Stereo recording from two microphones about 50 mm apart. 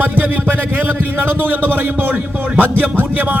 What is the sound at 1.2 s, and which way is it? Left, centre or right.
A man's voice, right.